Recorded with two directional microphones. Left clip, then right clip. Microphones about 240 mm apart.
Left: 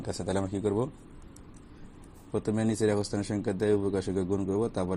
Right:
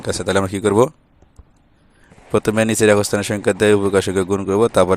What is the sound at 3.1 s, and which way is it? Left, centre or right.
Speech, right.